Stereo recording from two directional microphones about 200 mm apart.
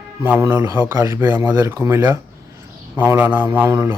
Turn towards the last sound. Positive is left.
turn(degrees=-15)  # may be behind; listen again after turning